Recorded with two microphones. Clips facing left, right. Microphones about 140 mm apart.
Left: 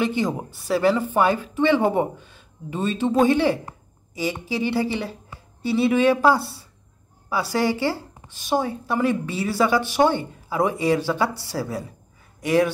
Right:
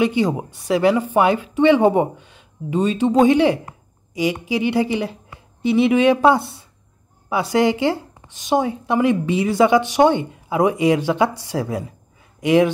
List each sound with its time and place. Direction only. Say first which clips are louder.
0.0 s a woman's voice: right 5 dB; 15° right (ahead or behind)